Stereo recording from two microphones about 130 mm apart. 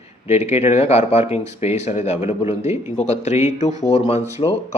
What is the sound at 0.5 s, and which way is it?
Speech, 55° left (ahead or behind).